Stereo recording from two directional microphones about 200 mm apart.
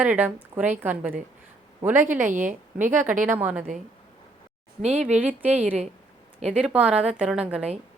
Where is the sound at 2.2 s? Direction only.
40° right (ahead or behind).